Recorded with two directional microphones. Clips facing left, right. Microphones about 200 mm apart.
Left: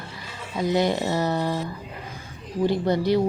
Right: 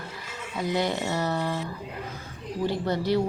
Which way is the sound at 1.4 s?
35° left (ahead or behind).